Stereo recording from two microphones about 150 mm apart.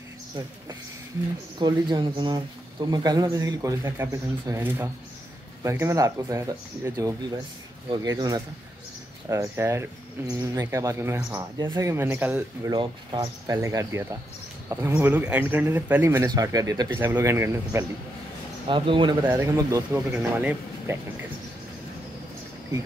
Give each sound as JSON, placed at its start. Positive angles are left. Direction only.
{"t": 1.6, "sound": "speech", "side_deg": -30}
{"t": 11.9, "sound": "speech", "side_deg": -15}
{"t": 12.6, "sound": "speech", "side_deg": -30}
{"t": 16.3, "sound": "speech", "side_deg": -25}
{"t": 18.7, "sound": "speech", "side_deg": -35}
{"t": 19.2, "sound": "speech", "side_deg": -20}